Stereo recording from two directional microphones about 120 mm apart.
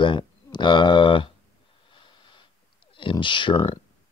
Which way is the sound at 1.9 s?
45° left (ahead or behind).